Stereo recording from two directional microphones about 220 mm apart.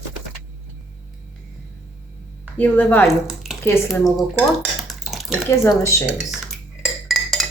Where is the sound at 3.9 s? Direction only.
Centre (ahead or behind).